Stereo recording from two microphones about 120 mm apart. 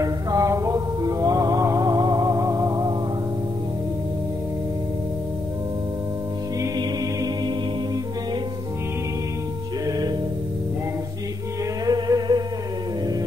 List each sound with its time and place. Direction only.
0.0 s music: 30° right (ahead or behind)
6.8 s a capella: 40° right (ahead or behind)
9.8 s music: 35° right (ahead or behind)
11.8 s music: 35° right (ahead or behind)